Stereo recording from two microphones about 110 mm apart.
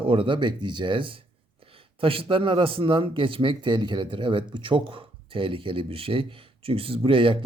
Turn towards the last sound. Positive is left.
turn(degrees=-50)  # may be behind; listen again after turning